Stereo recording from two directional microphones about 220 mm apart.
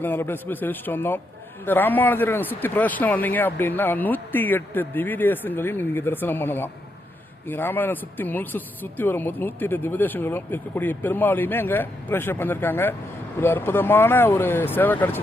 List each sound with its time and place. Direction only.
0.0 s speech: 10° left (ahead or behind)